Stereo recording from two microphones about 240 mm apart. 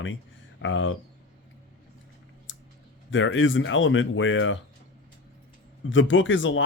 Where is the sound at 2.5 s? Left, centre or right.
Left.